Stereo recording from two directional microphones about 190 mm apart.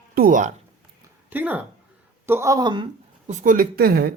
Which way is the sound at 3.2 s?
40° right (ahead or behind).